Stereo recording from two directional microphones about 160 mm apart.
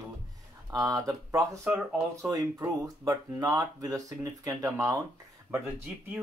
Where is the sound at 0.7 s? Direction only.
20° right (ahead or behind).